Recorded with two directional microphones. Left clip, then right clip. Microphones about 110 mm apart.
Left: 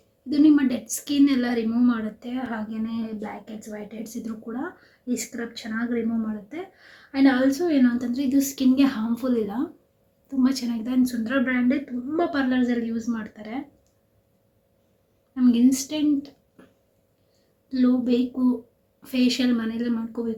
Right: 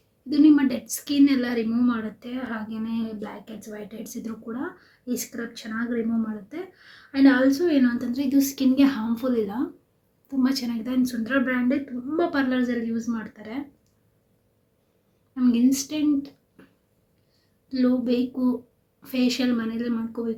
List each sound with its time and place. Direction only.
0.3 s a woman's voice: 15° right (ahead or behind)
15.4 s speech: 10° right (ahead or behind)
17.7 s a woman's voice: 20° right (ahead or behind)